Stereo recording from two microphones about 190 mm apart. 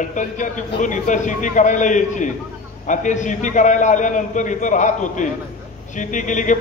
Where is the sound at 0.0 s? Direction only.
40° left (ahead or behind).